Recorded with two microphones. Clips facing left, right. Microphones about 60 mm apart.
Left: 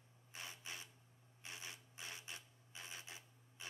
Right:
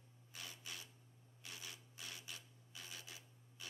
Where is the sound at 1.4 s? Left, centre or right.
Left.